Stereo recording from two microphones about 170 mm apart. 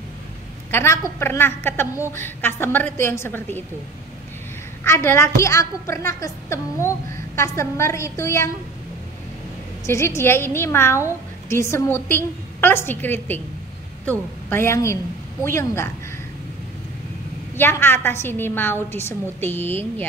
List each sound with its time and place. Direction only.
0.7 s a woman's voice: 15° left (ahead or behind)
4.8 s a woman's voice: 15° left (ahead or behind)
9.8 s a woman's voice: 15° left (ahead or behind)
14.5 s a woman's voice: 15° left (ahead or behind)
17.6 s a woman's voice: 10° left (ahead or behind)